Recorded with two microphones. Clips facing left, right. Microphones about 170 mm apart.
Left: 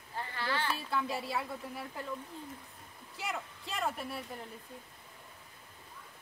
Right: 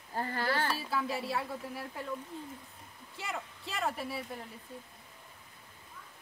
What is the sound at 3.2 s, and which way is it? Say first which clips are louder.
Speech: left 1 dB; centre (ahead or behind).